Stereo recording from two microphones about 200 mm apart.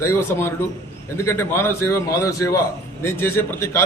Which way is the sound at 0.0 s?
10° left (ahead or behind).